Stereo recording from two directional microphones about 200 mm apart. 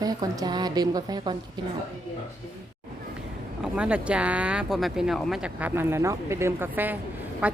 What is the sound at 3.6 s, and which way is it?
Speech, 5° right (ahead or behind).